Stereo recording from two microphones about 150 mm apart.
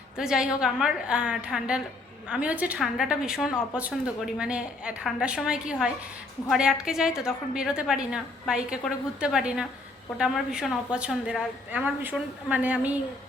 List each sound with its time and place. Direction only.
0.2 s a woman's voice: 5° right (ahead or behind)